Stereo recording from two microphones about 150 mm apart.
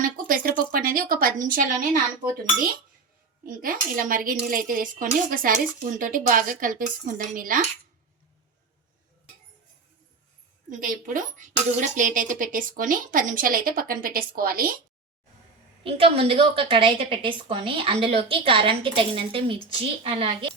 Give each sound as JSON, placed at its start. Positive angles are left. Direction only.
{"t": 0.0, "sound": "a woman's voice", "side_deg": -70}
{"t": 3.4, "sound": "speech", "side_deg": -70}
{"t": 10.7, "sound": "a woman's voice", "side_deg": -65}
{"t": 15.8, "sound": "a woman's voice", "side_deg": -35}